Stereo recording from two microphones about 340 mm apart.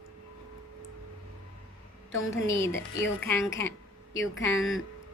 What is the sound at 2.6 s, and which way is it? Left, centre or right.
A woman's voice, centre.